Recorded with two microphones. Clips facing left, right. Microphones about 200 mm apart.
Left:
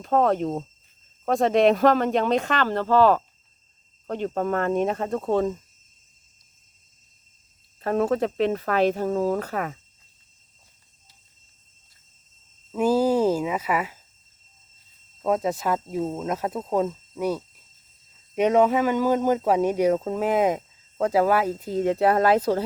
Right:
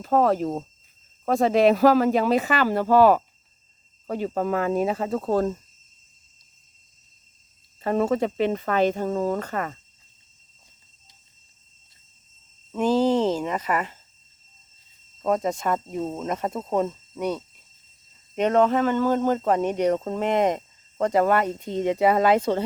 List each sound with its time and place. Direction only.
0.0 s speech: centre (ahead or behind)
7.8 s speech: centre (ahead or behind)
12.7 s speech: 10° left (ahead or behind)
15.2 s speech: 5° left (ahead or behind)